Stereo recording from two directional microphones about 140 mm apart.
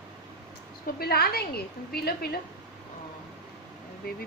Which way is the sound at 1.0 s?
90° left.